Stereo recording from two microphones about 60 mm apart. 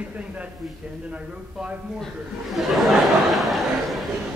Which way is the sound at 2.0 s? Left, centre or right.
Centre.